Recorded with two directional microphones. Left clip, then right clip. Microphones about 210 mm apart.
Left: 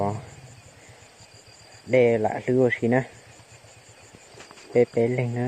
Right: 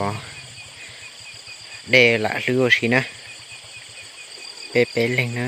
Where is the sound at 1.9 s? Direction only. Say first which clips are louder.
Right 4 dB; 15° right (ahead or behind).